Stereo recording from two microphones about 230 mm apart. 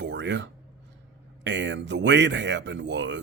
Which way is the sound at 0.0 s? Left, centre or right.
Right.